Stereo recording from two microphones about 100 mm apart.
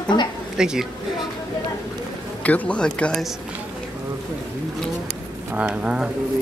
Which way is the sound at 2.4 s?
15° left (ahead or behind).